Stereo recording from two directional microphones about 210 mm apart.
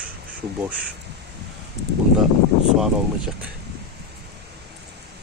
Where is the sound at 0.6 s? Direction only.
5° right (ahead or behind).